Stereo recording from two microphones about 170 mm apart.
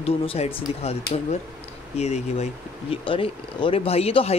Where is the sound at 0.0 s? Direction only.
35° left (ahead or behind).